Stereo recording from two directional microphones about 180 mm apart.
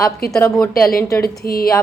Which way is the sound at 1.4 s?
55° left (ahead or behind).